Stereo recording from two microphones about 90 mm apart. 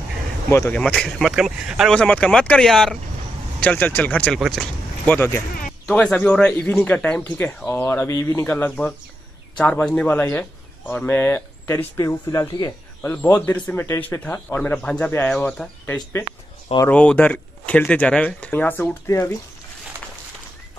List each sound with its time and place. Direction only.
0.7 s speech: 10° left (ahead or behind)
1.2 s speech: 5° right (ahead or behind)
2.0 s speech: 10° left (ahead or behind)
3.6 s speech: 20° left (ahead or behind)
4.4 s speech: centre (ahead or behind)
5.0 s speech: 20° left (ahead or behind)
8.5 s speech: 20° left (ahead or behind); by 12.6 s 40° left (ahead or behind)
13.0 s speech: 20° left (ahead or behind)
15.3 s speech: 10° left (ahead or behind)
16.9 s speech: 15° left (ahead or behind)